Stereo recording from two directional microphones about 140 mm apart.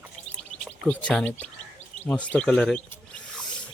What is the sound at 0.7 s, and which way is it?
Speech, 10° left (ahead or behind).